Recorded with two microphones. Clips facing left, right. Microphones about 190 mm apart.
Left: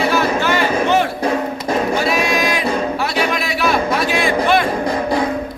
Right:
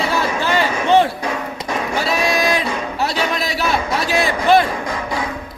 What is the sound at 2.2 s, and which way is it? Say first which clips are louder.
Singing: even; 35° right (ahead or behind).